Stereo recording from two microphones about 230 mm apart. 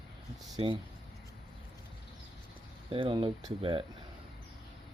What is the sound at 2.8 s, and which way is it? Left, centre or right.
Speech, right.